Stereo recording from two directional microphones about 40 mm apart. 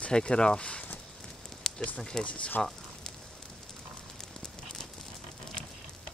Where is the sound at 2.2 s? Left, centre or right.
Left.